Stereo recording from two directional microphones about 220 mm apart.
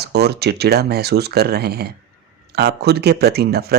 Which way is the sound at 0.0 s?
50° right (ahead or behind).